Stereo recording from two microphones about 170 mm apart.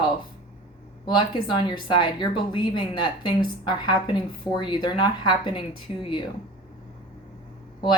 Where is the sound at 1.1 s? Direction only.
25° left (ahead or behind).